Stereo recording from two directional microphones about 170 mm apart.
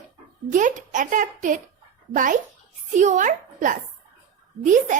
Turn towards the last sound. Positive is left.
turn(degrees=-50)  # may be behind; listen again after turning